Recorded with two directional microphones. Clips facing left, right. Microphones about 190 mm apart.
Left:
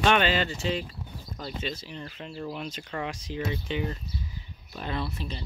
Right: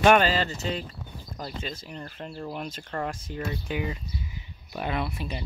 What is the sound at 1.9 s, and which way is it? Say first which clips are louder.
Speech: right 1 dB; 45° right (ahead or behind).